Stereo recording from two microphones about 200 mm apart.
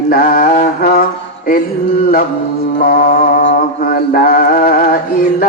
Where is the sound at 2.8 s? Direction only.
45° left (ahead or behind).